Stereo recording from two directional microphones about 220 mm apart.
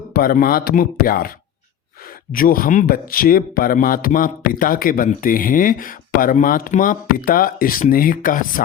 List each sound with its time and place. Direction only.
0.1 s speech: 40° left (ahead or behind)
2.3 s speech: 40° left (ahead or behind)